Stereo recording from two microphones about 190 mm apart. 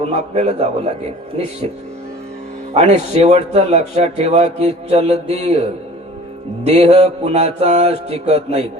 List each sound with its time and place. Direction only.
0.0 s speech: 35° right (ahead or behind)
2.7 s speech: 35° right (ahead or behind)
6.7 s speech: 35° right (ahead or behind)